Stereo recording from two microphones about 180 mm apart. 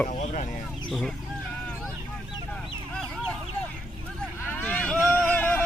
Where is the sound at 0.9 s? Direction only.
5° left (ahead or behind).